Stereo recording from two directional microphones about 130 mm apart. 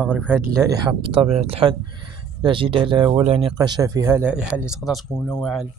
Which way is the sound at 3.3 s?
50° right (ahead or behind).